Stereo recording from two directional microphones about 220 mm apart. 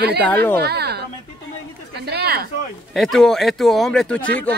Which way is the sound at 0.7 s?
45° right (ahead or behind).